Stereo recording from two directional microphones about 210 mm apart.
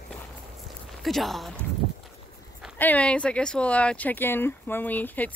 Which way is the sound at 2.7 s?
5° left (ahead or behind).